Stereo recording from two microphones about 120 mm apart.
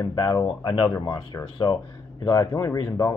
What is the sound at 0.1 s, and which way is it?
Speech, 30° left (ahead or behind).